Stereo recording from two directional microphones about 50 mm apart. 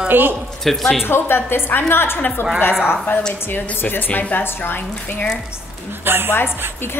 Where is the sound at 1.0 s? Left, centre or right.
Left.